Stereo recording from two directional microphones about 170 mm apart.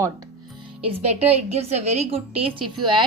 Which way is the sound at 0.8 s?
35° right (ahead or behind).